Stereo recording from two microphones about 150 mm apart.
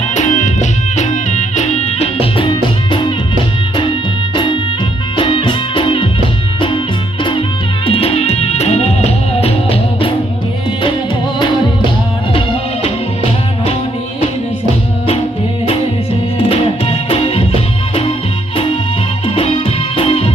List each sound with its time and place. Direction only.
0.1 s music: 55° left (ahead or behind); by 6.8 s 35° left (ahead or behind)
7.9 s music: 40° left (ahead or behind)
16.4 s music: 40° left (ahead or behind)
19.2 s music: 40° left (ahead or behind)